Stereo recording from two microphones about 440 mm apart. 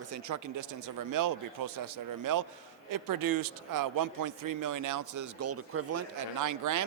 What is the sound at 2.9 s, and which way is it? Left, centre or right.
A man's voice, right.